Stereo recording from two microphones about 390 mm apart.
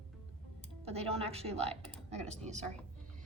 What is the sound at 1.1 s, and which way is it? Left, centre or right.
Speech, centre.